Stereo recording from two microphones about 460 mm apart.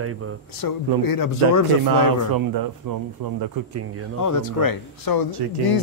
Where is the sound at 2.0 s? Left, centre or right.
Right.